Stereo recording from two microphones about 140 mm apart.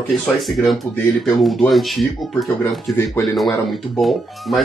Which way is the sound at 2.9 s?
15° left (ahead or behind).